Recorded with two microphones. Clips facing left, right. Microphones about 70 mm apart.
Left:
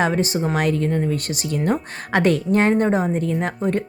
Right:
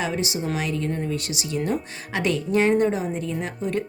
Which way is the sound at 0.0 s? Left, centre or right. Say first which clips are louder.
Left 6 dB; left.